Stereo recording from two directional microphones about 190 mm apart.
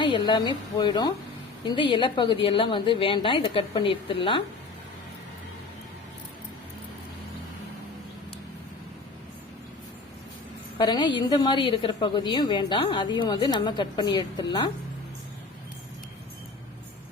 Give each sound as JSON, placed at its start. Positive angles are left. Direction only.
{"t": 0.0, "sound": "a woman's voice", "side_deg": 25}
{"t": 10.8, "sound": "a woman's voice", "side_deg": 25}